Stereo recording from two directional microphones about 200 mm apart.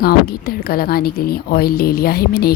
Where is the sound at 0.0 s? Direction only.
50° left (ahead or behind).